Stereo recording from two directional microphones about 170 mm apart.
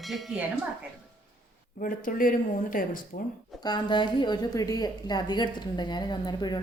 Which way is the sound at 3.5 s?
25° left (ahead or behind).